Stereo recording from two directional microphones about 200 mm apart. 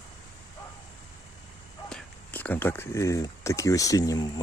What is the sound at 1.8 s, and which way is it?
Speech, 5° left (ahead or behind).